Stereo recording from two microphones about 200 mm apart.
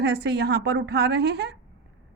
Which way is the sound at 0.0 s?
55° right (ahead or behind).